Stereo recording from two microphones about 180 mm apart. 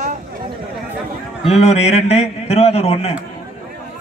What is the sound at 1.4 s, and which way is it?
A man's voice, 35° left (ahead or behind).